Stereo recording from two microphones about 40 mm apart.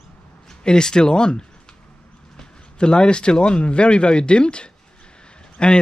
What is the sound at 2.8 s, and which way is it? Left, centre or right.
Speech, left.